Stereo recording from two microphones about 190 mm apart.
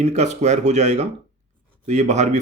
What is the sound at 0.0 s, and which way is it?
Speech, 35° right (ahead or behind).